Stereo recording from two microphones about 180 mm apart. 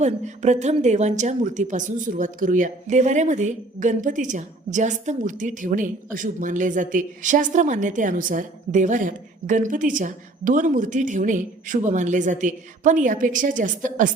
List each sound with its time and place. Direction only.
0.0 s a woman's voice: 40° right (ahead or behind)